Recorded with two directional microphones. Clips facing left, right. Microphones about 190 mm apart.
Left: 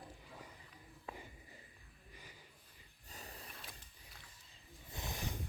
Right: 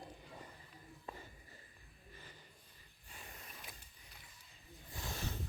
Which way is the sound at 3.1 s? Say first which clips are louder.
Left 3 dB; 40° left (ahead or behind).